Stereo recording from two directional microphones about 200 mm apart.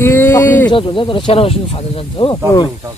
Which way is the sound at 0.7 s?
25° left (ahead or behind).